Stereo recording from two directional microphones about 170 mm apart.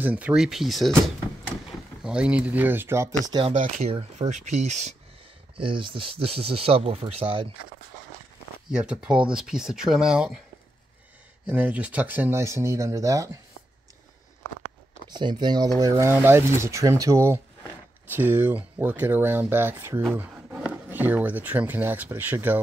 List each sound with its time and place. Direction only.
0.0 s speech: 10° right (ahead or behind)
3.3 s speech: 30° right (ahead or behind)
3.5 s speech: 50° right (ahead or behind)
5.6 s speech: 30° right (ahead or behind)
8.7 s speech: 5° right (ahead or behind)
11.4 s speech: 10° right (ahead or behind)
15.0 s speech: 25° right (ahead or behind)
20.2 s a sound: 5° right (ahead or behind)
20.9 s speech: 10° right (ahead or behind)